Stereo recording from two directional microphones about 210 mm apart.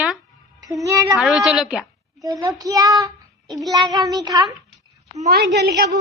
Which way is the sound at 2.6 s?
15° right (ahead or behind).